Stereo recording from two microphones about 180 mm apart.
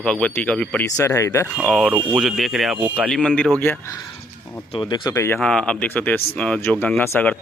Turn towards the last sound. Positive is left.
turn(degrees=10)  # may be behind; listen again after turning